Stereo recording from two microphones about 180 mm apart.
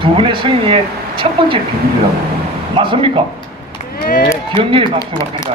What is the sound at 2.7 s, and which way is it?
Speech, 30° right (ahead or behind).